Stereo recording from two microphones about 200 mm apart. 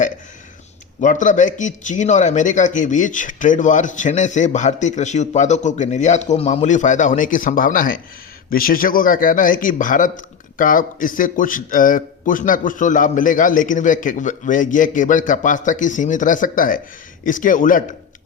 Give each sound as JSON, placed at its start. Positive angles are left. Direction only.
{"t": 1.0, "sound": "a man's voice", "side_deg": 40}